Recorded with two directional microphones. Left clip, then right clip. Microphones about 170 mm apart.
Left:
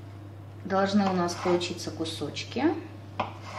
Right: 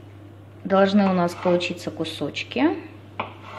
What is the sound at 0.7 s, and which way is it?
A woman's voice, 45° right (ahead or behind).